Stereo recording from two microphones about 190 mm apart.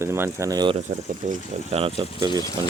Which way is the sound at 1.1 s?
40° right (ahead or behind).